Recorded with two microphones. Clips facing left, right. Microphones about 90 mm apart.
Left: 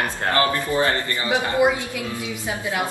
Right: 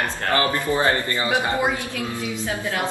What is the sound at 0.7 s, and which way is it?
Speech, 20° right (ahead or behind).